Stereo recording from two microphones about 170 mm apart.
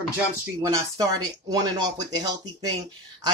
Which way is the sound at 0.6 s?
20° right (ahead or behind).